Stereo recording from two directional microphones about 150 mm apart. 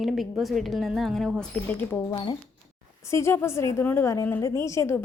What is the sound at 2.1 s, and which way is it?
Speech, 30° left (ahead or behind).